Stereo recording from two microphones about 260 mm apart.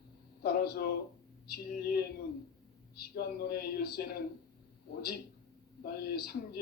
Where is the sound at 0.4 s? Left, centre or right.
Left.